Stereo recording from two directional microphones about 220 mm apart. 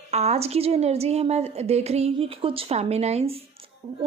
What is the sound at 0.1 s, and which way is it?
Speech, 30° right (ahead or behind).